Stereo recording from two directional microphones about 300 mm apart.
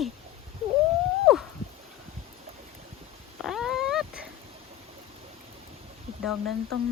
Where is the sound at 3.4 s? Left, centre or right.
Centre.